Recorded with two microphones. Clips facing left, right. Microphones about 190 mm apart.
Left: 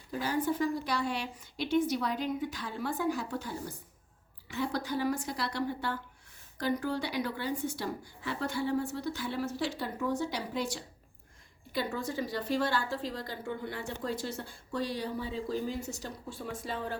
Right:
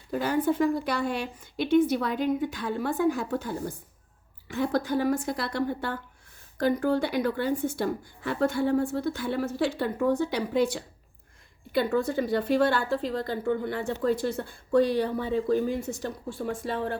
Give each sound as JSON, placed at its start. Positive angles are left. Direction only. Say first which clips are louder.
{"t": 0.1, "sound": "a woman's voice", "louder": "right 6 dB", "side_deg": -60}